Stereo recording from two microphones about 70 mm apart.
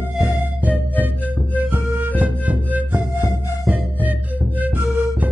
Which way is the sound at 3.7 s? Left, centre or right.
Right.